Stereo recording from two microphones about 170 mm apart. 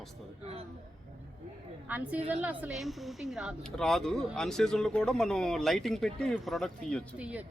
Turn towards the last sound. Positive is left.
turn(degrees=-10)  # may be behind; listen again after turning